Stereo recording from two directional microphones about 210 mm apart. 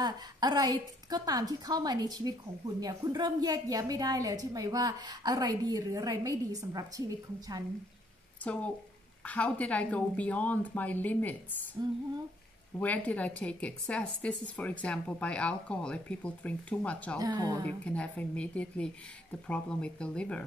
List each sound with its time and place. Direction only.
0.0 s a woman's voice: 20° right (ahead or behind)
8.5 s a woman's voice: 5° left (ahead or behind)
11.8 s a sound: 20° right (ahead or behind)
12.7 s a woman's voice: 5° left (ahead or behind)
17.2 s a woman's voice: 15° right (ahead or behind)
17.6 s a woman's voice: 5° left (ahead or behind)